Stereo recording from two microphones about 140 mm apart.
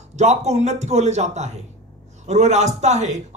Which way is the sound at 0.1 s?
55° right (ahead or behind).